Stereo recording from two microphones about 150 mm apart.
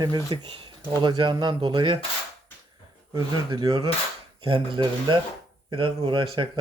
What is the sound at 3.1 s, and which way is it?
Speech, 25° right (ahead or behind).